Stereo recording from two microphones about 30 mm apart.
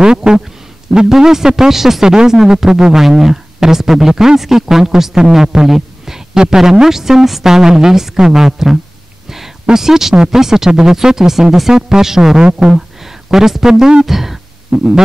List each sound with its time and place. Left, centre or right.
0.0 s a man's voice: right
9.8 s speech: centre
12.7 s a sound: centre
14.0 s speech: centre
14.7 s hum: centre